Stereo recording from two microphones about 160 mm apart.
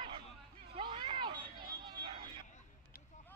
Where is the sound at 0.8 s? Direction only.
30° right (ahead or behind).